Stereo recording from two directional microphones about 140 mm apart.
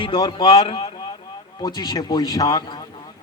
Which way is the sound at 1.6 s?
30° left (ahead or behind).